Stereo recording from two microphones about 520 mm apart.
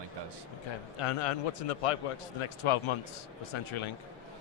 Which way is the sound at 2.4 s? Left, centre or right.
Left.